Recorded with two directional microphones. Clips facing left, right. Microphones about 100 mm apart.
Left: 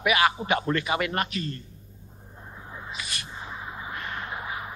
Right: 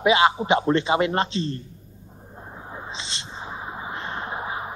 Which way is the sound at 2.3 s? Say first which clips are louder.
Right 4 dB; 25° right (ahead or behind).